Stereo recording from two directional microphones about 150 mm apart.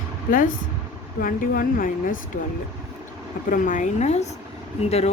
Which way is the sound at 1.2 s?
70° left (ahead or behind).